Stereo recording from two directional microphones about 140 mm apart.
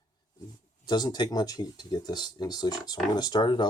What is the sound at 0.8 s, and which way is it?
Speech, 30° left (ahead or behind).